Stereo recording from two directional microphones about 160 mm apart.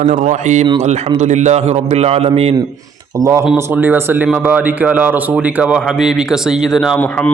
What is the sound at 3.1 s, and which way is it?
Speech, 20° right (ahead or behind).